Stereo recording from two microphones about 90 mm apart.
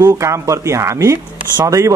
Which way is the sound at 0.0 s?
35° right (ahead or behind).